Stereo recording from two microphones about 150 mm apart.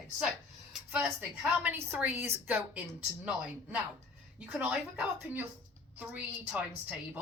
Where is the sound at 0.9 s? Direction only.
10° right (ahead or behind).